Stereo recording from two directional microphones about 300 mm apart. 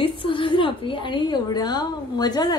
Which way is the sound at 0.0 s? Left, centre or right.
Centre.